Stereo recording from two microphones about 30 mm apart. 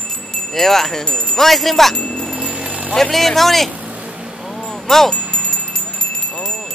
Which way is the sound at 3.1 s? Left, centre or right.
Centre.